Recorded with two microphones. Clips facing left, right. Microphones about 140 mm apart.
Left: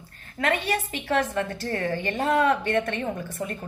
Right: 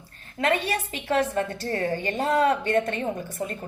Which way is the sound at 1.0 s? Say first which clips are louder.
Right 2 dB; 25° right (ahead or behind).